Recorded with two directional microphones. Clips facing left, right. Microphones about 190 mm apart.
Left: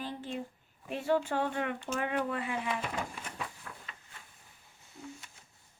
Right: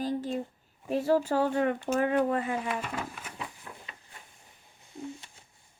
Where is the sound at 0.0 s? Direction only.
40° right (ahead or behind).